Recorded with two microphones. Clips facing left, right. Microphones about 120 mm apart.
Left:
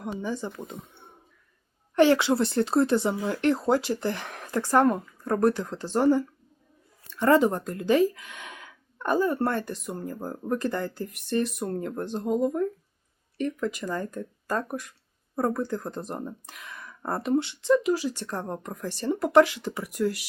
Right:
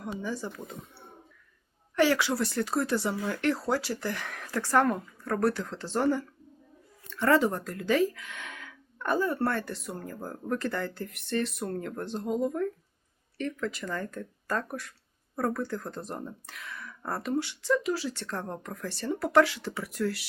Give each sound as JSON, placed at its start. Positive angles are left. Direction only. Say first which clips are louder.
{"t": 0.2, "sound": "speech", "louder": "left 3 dB", "side_deg": 20}